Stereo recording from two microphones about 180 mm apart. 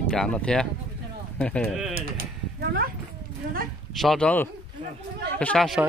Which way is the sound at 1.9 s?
60° right (ahead or behind).